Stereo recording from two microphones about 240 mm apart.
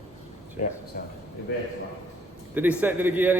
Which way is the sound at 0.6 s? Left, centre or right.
Left.